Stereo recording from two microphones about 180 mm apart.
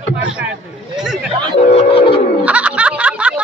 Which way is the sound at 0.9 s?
5° right (ahead or behind).